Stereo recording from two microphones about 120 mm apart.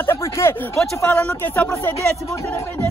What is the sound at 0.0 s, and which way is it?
Speech, 20° left (ahead or behind).